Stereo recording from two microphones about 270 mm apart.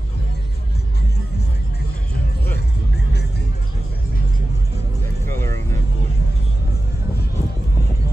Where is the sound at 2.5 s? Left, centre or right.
Left.